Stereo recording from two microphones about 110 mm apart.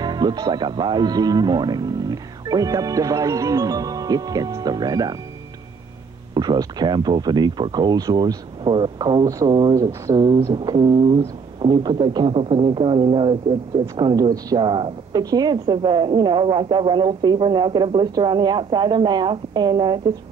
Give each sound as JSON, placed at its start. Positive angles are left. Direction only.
{"t": 0.0, "sound": "speech", "side_deg": -40}
{"t": 6.3, "sound": "speech", "side_deg": -40}
{"t": 9.5, "sound": "a woman's voice", "side_deg": -45}
{"t": 9.8, "sound": "a sound", "side_deg": -30}
{"t": 10.1, "sound": "a woman's voice", "side_deg": -50}